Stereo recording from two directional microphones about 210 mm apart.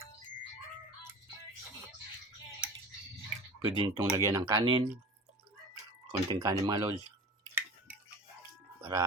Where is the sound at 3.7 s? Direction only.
20° right (ahead or behind).